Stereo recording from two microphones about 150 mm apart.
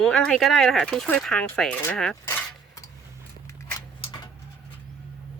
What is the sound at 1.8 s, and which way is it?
Cutlery, 5° left (ahead or behind).